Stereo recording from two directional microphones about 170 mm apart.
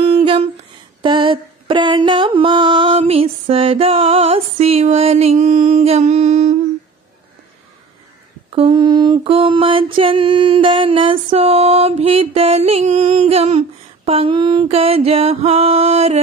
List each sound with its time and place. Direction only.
0.0 s humming: 30° right (ahead or behind)
1.0 s mantra: 30° right (ahead or behind); by 6.6 s 45° right (ahead or behind)
8.5 s a sound: 35° right (ahead or behind)
11.2 s music: 35° right (ahead or behind)